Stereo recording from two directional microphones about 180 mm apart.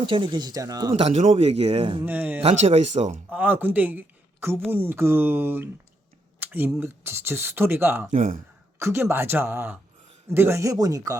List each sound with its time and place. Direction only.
0.0 s speech: 25° right (ahead or behind)
0.9 s speech: 35° right (ahead or behind)
2.0 s speech: 10° right (ahead or behind)
2.4 s speech: 35° right (ahead or behind)
3.2 s speech: 10° right (ahead or behind)
8.1 s speech: 40° right (ahead or behind)
8.8 s speech: 15° right (ahead or behind)